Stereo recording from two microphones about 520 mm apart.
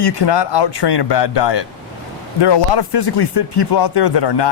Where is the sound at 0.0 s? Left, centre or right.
Left.